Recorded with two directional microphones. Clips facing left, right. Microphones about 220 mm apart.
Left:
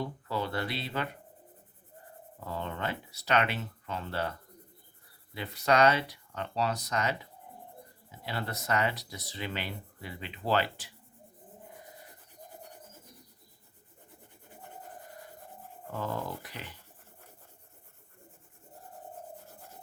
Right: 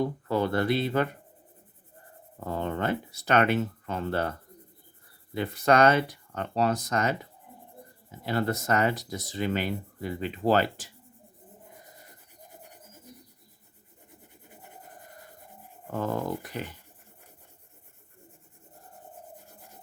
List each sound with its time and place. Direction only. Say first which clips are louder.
0.0 s speech: right 7 dB; 50° right (ahead or behind)
2.4 s speech: right 6 dB; 50° right (ahead or behind)
8.2 s speech: right 9 dB; 45° right (ahead or behind)
15.9 s speech: right 6 dB; 50° right (ahead or behind)